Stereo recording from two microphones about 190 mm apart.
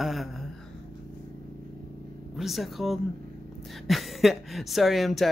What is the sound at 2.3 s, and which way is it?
Speech, centre (ahead or behind).